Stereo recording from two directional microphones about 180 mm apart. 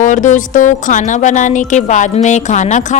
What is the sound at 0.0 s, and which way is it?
Speech, 45° left (ahead or behind).